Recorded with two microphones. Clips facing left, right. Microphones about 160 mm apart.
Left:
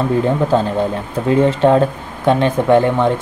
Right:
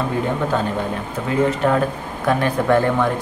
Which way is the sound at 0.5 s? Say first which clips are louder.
Left 6 dB; 30° left (ahead or behind).